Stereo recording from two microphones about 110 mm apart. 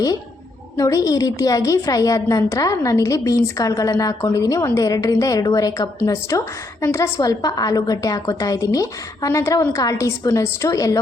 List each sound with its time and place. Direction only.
0.8 s a woman's voice: 30° left (ahead or behind)